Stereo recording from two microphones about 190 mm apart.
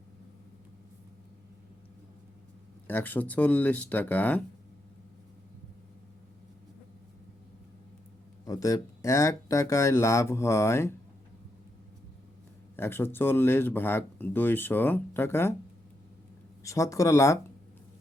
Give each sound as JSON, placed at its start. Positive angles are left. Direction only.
{"t": 2.8, "sound": "speech", "side_deg": 10}
{"t": 8.4, "sound": "speech", "side_deg": 20}
{"t": 12.7, "sound": "speech", "side_deg": 10}
{"t": 16.6, "sound": "speech", "side_deg": 15}